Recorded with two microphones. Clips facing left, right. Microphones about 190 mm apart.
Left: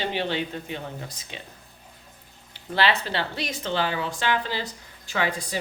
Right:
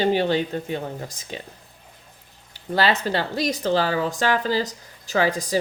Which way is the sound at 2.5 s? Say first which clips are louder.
Right 3 dB; 40° right (ahead or behind).